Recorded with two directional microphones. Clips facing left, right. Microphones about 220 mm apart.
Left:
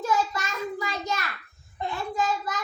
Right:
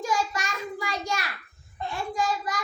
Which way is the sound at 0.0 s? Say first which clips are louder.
Left 2 dB; 15° right (ahead or behind).